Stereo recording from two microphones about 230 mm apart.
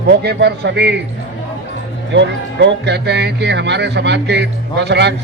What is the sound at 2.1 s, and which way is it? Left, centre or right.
Speech, right.